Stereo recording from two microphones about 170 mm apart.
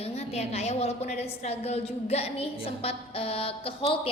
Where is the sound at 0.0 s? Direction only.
40° left (ahead or behind).